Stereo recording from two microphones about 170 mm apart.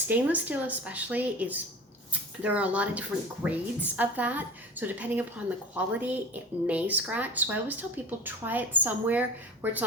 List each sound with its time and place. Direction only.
0.1 s a woman's voice: 10° right (ahead or behind)